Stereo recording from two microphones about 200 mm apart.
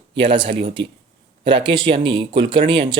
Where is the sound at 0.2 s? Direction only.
25° right (ahead or behind).